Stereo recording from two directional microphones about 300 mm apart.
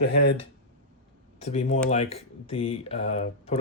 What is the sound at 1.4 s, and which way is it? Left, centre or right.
Speech, left.